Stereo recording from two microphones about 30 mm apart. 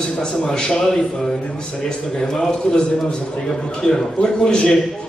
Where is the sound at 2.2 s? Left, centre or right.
Centre.